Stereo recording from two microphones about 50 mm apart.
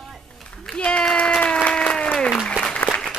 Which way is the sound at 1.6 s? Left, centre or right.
Left.